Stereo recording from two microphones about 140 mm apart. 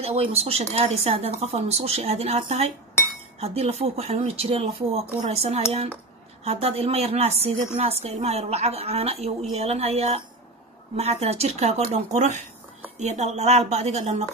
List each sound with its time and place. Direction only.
0.0 s a woman's voice: 45° right (ahead or behind)